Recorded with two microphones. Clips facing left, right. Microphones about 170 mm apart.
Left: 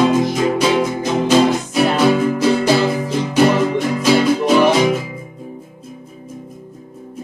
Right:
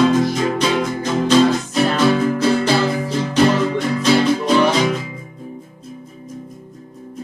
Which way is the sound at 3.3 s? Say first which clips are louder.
Left 2 dB; 10° left (ahead or behind).